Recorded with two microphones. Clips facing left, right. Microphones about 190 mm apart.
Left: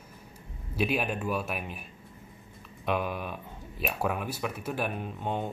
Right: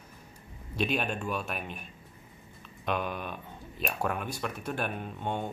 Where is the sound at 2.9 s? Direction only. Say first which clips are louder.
Left 2 dB; 5° left (ahead or behind).